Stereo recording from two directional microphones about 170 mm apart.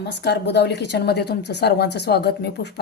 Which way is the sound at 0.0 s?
85° left.